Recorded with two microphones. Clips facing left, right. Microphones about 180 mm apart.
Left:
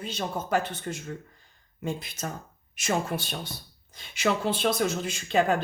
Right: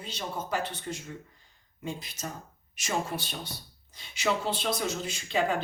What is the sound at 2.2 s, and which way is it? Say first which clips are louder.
Speech: left 3 dB; 50° left (ahead or behind).